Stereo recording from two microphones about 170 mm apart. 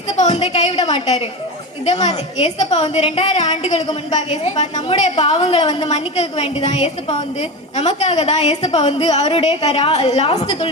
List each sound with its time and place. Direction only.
0.2 s a woman's voice: 40° left (ahead or behind)
5.4 s a woman's voice: 25° left (ahead or behind)
5.9 s a woman's voice: 40° left (ahead or behind)